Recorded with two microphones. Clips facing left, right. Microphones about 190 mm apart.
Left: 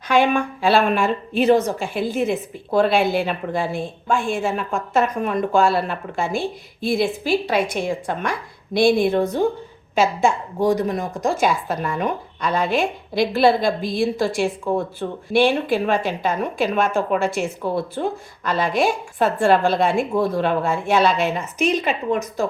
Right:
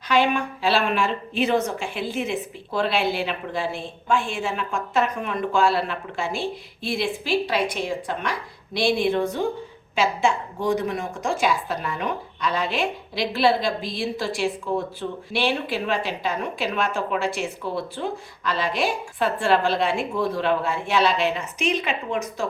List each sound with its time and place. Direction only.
0.1 s a woman's voice: 50° left (ahead or behind)